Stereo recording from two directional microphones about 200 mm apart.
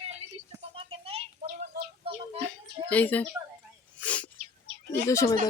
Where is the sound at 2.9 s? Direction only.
10° left (ahead or behind).